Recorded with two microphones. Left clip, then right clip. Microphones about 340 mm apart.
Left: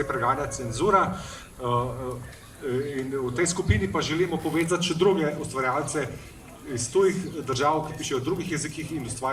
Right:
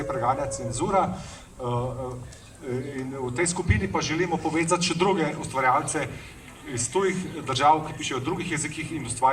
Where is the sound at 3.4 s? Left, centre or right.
Centre.